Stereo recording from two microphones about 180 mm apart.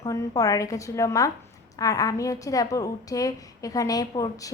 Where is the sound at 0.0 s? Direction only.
20° left (ahead or behind).